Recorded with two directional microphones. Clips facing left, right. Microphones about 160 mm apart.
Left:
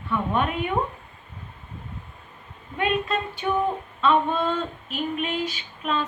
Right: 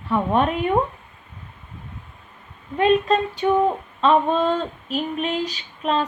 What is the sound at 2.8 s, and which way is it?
Speech, 35° right (ahead or behind).